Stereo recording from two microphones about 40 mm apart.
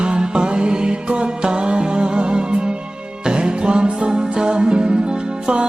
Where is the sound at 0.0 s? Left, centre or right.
Right.